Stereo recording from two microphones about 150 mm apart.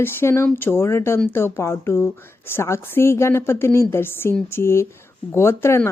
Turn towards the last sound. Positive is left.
turn(degrees=15)  # may be behind; listen again after turning